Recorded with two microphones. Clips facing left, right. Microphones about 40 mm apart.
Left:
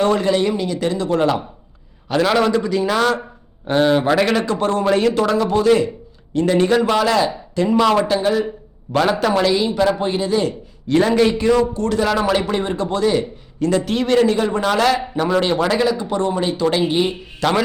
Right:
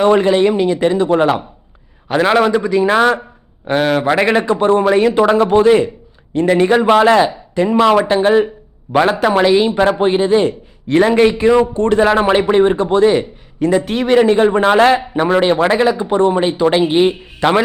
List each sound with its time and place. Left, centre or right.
0.0 s a man's voice: right
5.2 s a man's voice: right